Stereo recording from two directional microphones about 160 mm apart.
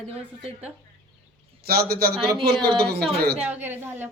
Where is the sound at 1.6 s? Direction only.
75° right (ahead or behind).